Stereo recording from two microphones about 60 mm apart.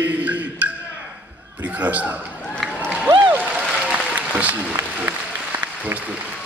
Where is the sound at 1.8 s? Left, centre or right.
Right.